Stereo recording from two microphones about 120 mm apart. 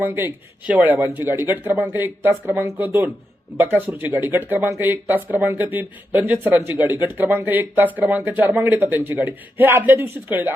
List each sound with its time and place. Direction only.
0.0 s speech: 20° right (ahead or behind)